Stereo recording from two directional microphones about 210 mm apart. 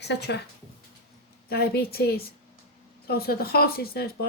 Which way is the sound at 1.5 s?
50° left (ahead or behind).